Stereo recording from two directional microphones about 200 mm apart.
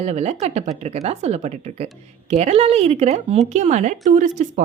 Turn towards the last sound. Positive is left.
turn(degrees=-40)  # may be behind; listen again after turning